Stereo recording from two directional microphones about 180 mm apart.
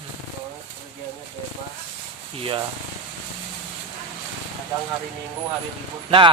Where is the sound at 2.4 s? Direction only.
30° right (ahead or behind).